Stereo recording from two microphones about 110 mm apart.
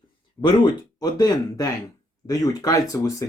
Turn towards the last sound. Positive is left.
turn(degrees=30)  # may be behind; listen again after turning